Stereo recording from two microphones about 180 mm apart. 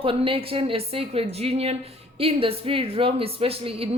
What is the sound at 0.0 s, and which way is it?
Speech, 30° right (ahead or behind).